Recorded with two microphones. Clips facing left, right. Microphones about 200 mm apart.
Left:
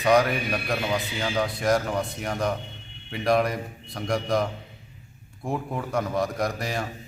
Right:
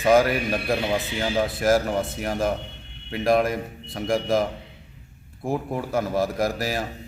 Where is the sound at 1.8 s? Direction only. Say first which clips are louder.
Right 3 dB; 30° right (ahead or behind).